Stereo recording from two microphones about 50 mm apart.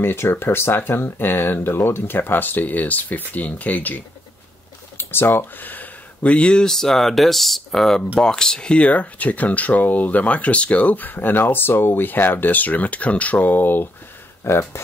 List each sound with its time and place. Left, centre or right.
0.0 s speech: left
4.9 s speech: left
6.2 s speech: left
14.4 s speech: left